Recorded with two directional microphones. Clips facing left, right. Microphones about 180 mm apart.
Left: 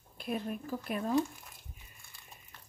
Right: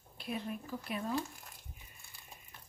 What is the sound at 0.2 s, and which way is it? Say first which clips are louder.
Speech: left 4 dB; 50° left (ahead or behind).